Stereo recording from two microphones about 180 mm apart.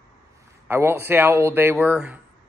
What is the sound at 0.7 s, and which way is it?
Speech, 15° right (ahead or behind).